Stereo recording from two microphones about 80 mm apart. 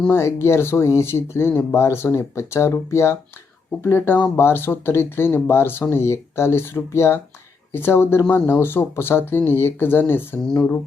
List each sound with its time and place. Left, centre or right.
0.1 s speech: left